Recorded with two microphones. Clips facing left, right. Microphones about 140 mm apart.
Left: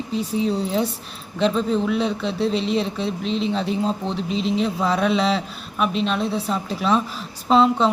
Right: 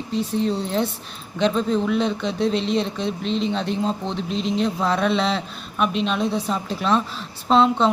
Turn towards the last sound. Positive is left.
turn(degrees=5)  # may be behind; listen again after turning